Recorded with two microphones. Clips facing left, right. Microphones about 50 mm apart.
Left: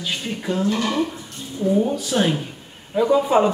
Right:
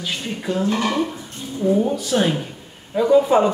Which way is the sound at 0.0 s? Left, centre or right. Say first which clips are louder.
Even; centre.